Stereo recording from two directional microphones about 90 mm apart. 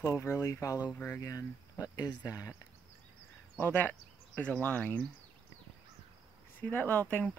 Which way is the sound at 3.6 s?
20° left (ahead or behind).